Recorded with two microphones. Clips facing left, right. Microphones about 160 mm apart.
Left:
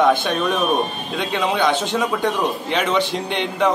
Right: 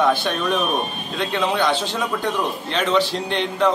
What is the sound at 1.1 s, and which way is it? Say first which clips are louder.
Speech: left 1 dB; 15° left (ahead or behind).